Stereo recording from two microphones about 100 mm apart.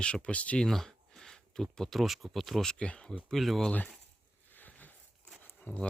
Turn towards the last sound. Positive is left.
turn(degrees=15)  # may be behind; listen again after turning